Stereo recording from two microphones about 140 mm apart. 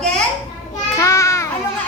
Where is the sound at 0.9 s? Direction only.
20° left (ahead or behind).